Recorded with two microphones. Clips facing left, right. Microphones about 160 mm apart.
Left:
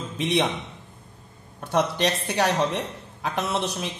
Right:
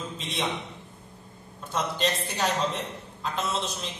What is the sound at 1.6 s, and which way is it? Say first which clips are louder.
A man's voice: left 5 dB; 70° left (ahead or behind).